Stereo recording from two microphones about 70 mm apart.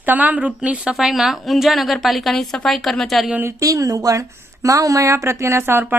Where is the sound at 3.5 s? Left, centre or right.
Right.